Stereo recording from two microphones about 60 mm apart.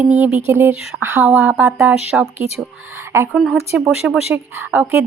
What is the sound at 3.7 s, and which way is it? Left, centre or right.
Speech, centre.